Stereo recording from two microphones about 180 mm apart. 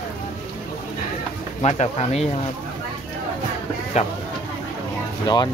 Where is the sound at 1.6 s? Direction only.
35° left (ahead or behind).